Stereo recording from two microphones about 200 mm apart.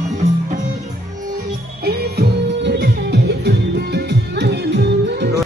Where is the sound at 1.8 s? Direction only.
50° right (ahead or behind).